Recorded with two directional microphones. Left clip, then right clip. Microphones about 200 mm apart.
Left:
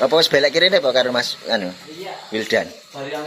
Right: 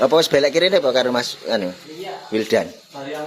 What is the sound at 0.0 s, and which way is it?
Speech, 15° right (ahead or behind).